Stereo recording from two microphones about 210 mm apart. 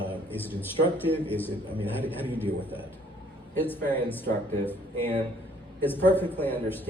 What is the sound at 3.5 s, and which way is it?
Speech, 10° left (ahead or behind).